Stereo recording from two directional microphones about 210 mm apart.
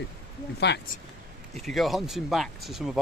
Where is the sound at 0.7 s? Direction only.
55° left (ahead or behind).